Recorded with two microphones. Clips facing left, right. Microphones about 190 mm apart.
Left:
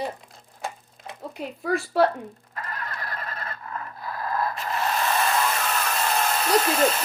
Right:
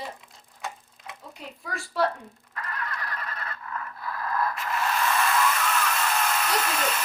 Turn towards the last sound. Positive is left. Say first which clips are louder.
# left 7 dB
turn(degrees=35)  # may be behind; listen again after turning